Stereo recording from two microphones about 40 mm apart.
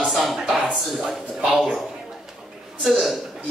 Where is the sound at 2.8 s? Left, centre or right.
Centre.